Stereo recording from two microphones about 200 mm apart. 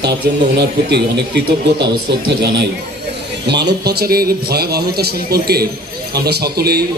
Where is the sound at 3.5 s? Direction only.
55° right (ahead or behind).